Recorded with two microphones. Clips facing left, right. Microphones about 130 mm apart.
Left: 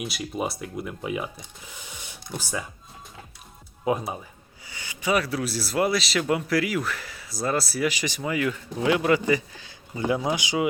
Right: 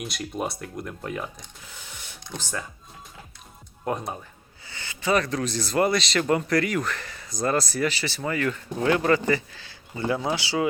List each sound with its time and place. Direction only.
0.0 s speech: centre (ahead or behind)
3.8 s a man's voice: 5° left (ahead or behind)